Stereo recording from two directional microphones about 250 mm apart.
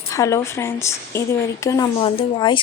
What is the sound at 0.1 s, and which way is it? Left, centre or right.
A woman's voice, centre.